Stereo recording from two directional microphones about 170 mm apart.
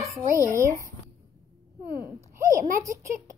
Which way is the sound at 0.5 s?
15° right (ahead or behind).